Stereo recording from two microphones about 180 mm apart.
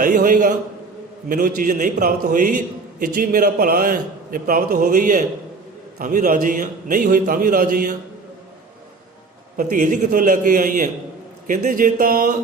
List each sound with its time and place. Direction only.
0.0 s a man's voice: 50° right (ahead or behind)
9.7 s a man's voice: 45° right (ahead or behind)